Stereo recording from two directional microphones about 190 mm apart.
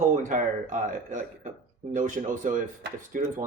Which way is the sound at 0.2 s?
45° right (ahead or behind).